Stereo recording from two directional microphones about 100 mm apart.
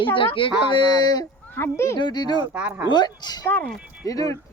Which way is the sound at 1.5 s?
25° left (ahead or behind).